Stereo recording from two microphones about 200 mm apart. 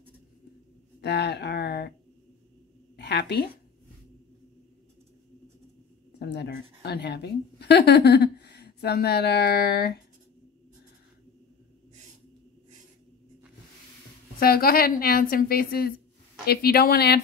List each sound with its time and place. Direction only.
1.0 s a sound: 55° left (ahead or behind)
3.0 s a woman's voice: 55° left (ahead or behind)
6.1 s a woman's voice: 55° left (ahead or behind)
14.4 s a woman's voice: 45° left (ahead or behind)